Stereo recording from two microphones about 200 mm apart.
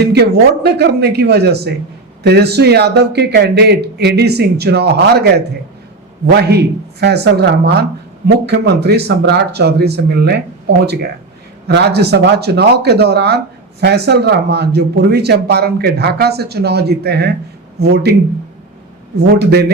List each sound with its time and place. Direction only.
0.0 s speech: 55° right (ahead or behind)
11.7 s speech: 55° right (ahead or behind)
19.3 s speech: 55° right (ahead or behind)